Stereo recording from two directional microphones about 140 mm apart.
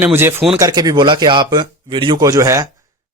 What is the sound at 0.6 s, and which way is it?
Speech, 30° right (ahead or behind).